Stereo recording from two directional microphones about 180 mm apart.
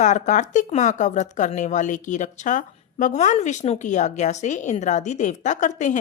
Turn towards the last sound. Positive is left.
turn(degrees=45)  # may be behind; listen again after turning